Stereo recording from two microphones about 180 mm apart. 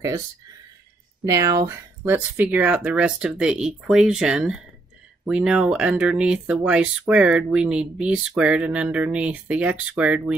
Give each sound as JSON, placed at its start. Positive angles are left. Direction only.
{"t": 1.2, "sound": "speech", "side_deg": -15}